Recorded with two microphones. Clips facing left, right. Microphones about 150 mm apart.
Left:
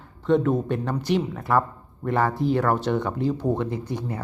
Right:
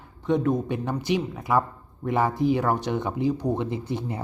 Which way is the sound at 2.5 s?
Centre (ahead or behind).